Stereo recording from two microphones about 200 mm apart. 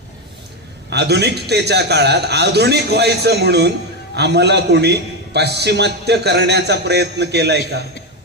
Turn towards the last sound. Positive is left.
turn(degrees=-55)  # may be behind; listen again after turning